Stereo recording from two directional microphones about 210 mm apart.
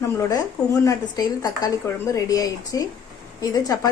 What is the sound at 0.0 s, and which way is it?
A woman's voice, 15° left (ahead or behind).